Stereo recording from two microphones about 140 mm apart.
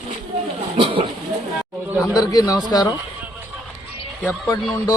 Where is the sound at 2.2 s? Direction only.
25° left (ahead or behind).